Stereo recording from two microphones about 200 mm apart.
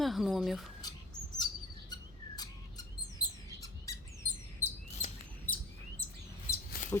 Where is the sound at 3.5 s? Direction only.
15° left (ahead or behind).